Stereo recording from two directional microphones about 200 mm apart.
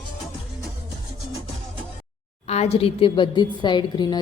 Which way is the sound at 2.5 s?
30° left (ahead or behind).